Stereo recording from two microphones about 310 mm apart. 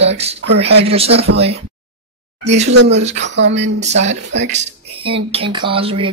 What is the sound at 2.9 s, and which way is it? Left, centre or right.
Speech, right.